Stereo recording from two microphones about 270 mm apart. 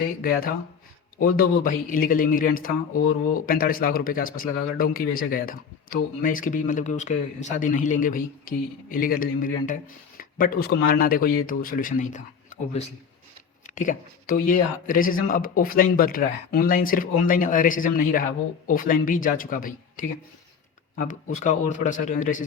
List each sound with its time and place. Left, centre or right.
0.2 s a man's voice: left